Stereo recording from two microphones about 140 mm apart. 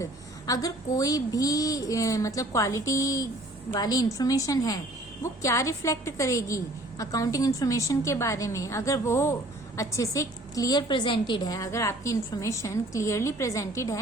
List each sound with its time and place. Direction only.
0.0 s a woman's voice: 25° left (ahead or behind)